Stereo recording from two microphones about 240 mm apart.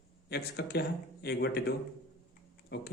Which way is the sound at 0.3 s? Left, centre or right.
Left.